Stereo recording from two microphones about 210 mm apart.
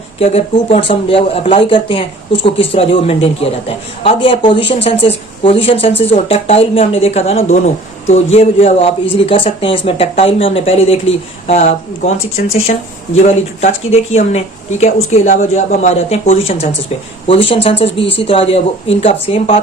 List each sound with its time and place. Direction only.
0.2 s speech: 30° left (ahead or behind)